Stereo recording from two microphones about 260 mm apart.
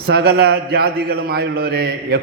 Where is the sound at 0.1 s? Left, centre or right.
Right.